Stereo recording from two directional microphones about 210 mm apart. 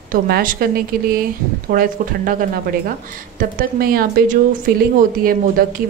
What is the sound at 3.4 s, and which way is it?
A woman's voice, 45° right (ahead or behind).